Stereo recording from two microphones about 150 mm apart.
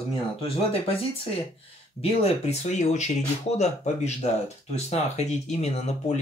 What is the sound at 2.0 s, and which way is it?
Speech, 45° left (ahead or behind).